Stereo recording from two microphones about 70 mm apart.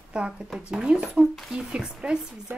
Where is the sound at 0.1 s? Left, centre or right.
Centre.